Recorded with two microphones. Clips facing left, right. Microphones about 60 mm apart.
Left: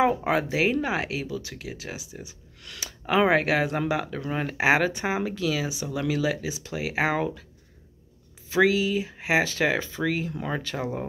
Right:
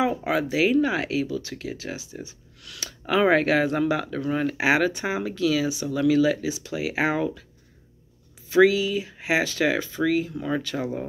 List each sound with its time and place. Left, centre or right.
0.0 s speech: left
8.5 s speech: left